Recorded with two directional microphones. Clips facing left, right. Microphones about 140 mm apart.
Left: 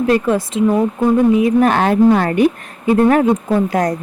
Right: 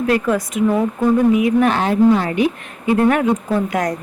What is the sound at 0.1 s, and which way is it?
A woman's voice, 30° left (ahead or behind).